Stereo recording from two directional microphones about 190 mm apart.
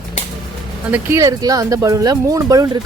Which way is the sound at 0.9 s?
15° right (ahead or behind).